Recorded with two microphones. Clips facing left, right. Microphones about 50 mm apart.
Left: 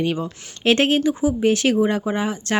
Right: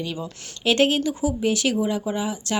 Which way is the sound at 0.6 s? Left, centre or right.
Left.